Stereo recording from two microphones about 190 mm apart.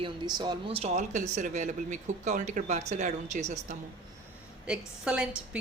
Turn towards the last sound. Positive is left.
turn(degrees=-5)  # may be behind; listen again after turning